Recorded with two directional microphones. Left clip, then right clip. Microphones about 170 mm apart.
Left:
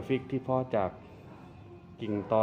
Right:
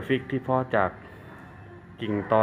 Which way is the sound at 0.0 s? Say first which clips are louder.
Right 5 dB; 10° left (ahead or behind).